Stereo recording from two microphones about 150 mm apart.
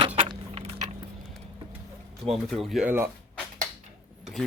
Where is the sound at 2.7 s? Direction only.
10° right (ahead or behind).